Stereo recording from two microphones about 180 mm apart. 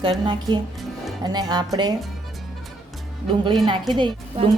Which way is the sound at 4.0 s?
25° right (ahead or behind).